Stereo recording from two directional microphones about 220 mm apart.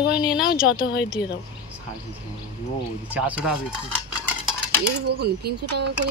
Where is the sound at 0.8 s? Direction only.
50° left (ahead or behind).